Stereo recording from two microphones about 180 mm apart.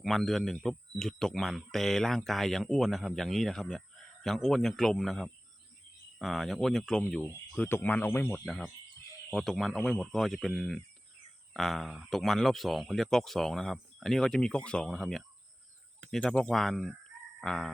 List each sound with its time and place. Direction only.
0.0 s speech: centre (ahead or behind)
8.4 s speech: centre (ahead or behind)
17.4 s fowl: 5° left (ahead or behind)